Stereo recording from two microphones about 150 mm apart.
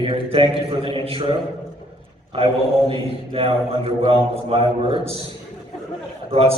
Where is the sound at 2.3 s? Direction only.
35° right (ahead or behind).